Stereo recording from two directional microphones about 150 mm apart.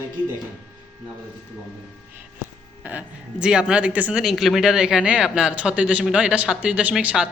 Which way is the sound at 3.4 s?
5° right (ahead or behind).